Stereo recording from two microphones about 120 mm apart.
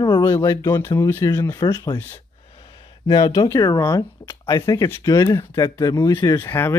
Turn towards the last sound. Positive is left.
turn(degrees=20)  # may be behind; listen again after turning